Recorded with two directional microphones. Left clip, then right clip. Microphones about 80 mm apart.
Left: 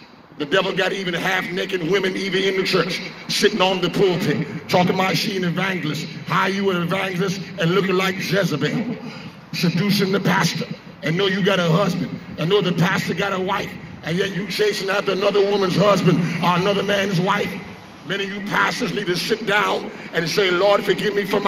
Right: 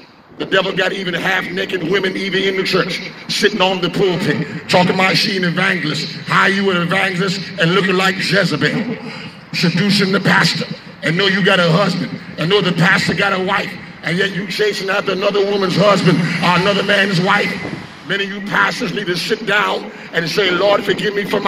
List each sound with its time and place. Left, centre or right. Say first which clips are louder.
0.4 s a man's voice: right 4 dB; centre
9.8 s a man's voice: right 4 dB; left